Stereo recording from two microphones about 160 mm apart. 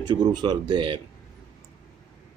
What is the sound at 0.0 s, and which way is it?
Speech, 25° right (ahead or behind).